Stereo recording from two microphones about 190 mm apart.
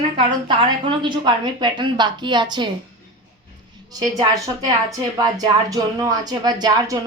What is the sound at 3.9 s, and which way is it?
A woman's voice, 20° right (ahead or behind).